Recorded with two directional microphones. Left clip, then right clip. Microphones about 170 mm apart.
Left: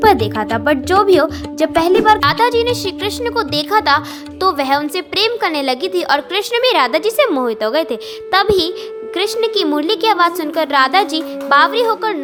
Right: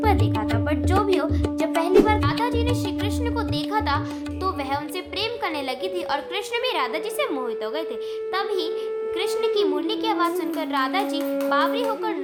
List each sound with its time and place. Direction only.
0.0 s speech: 40° left (ahead or behind)